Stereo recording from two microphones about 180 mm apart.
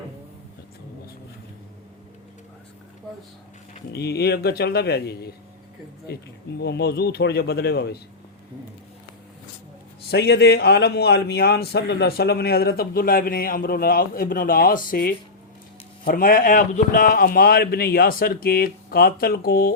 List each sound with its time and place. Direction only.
3.9 s a man's voice: 65° left (ahead or behind)
10.1 s a man's voice: 65° left (ahead or behind)